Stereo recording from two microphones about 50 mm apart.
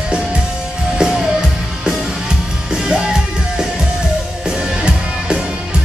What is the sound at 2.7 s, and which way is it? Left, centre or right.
Music, centre.